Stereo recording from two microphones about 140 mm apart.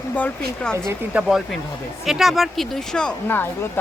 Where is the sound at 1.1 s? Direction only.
5° right (ahead or behind); by 3.8 s 15° left (ahead or behind).